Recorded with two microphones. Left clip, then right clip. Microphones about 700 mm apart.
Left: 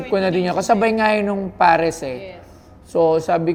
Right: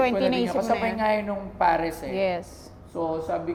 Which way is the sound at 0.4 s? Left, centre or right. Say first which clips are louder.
Left 7 dB; left.